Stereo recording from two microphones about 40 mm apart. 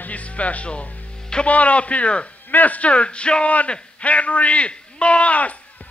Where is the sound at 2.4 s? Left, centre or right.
Left.